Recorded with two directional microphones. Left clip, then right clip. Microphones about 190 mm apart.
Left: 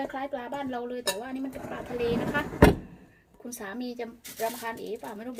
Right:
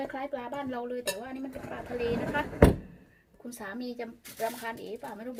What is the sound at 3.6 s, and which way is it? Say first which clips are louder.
Speech: left 2 dB; centre (ahead or behind).